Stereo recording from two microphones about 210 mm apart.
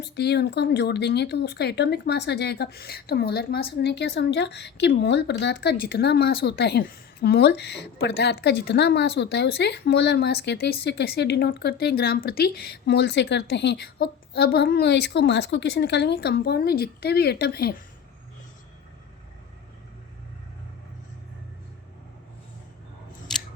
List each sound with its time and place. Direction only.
0.0 s speech: 50° left (ahead or behind)
23.3 s scissors: centre (ahead or behind)